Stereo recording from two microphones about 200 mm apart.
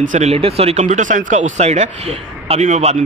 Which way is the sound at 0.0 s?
35° right (ahead or behind).